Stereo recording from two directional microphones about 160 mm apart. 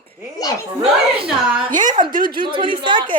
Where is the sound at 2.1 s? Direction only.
60° right (ahead or behind).